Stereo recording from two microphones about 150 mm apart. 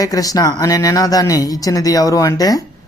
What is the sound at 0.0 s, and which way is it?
A man's voice, 25° left (ahead or behind).